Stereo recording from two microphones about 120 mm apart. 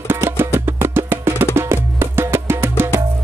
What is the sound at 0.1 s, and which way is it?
Music, 20° right (ahead or behind).